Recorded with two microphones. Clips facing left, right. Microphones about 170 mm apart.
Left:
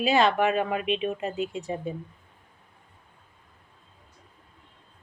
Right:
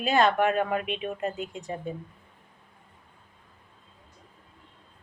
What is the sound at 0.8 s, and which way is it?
Speech, 50° right (ahead or behind).